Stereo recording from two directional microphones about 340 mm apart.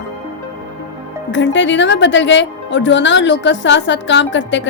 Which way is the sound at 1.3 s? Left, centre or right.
Left.